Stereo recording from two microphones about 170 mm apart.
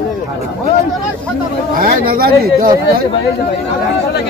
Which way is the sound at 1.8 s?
60° right (ahead or behind).